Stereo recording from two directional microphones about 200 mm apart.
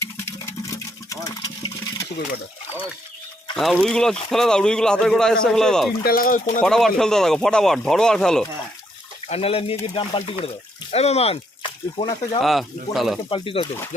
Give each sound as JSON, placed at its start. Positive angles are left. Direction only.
{"t": 0.0, "sound": "water", "side_deg": 15}
{"t": 3.5, "sound": "speech", "side_deg": 0}
{"t": 6.0, "sound": "speech", "side_deg": 45}
{"t": 6.6, "sound": "speech", "side_deg": 5}
{"t": 9.2, "sound": "speech", "side_deg": 30}
{"t": 12.4, "sound": "speech", "side_deg": 0}
{"t": 13.3, "sound": "speech", "side_deg": 25}